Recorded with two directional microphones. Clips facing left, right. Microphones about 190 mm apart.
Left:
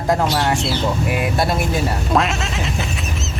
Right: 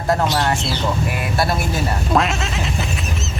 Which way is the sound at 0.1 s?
15° left (ahead or behind).